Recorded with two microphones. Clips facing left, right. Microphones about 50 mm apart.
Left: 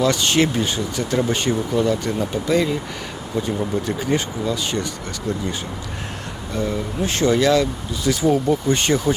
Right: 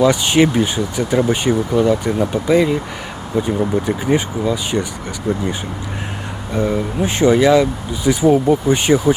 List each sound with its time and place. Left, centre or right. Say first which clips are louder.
0.0 s speech: right 5 dB; centre
6.5 s speech: right 5 dB; centre